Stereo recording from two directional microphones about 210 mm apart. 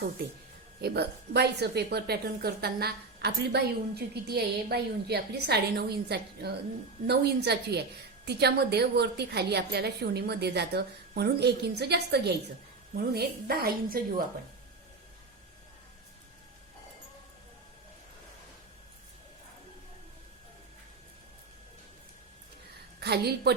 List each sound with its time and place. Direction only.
0.8 s a woman's voice: 50° right (ahead or behind)
23.0 s a woman's voice: 50° right (ahead or behind)